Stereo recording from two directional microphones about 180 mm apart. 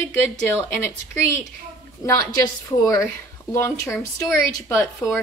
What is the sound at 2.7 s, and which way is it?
A woman's voice, 20° left (ahead or behind).